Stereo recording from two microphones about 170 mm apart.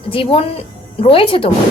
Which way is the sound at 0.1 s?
35° left (ahead or behind).